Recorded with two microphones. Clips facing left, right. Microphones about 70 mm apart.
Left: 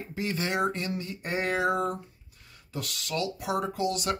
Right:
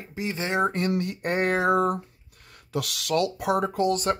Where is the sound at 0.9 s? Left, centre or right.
Right.